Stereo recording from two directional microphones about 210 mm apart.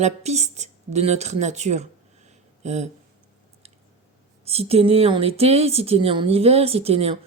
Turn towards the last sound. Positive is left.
turn(degrees=-30)  # may be behind; listen again after turning